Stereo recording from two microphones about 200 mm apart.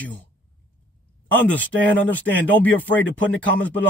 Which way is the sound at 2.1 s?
10° left (ahead or behind).